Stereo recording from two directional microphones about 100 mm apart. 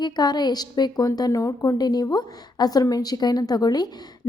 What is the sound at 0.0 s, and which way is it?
A woman's voice, 45° left (ahead or behind).